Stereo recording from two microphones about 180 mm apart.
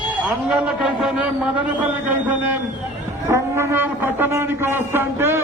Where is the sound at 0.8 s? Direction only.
5° right (ahead or behind).